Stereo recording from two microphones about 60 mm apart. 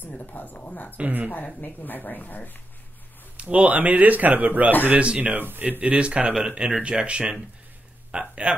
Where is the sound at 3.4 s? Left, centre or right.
Right.